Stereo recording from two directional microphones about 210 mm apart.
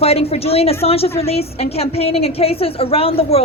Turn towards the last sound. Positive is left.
turn(degrees=25)  # may be behind; listen again after turning